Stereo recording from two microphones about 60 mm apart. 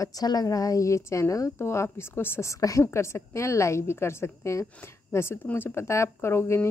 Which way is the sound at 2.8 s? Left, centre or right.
Left.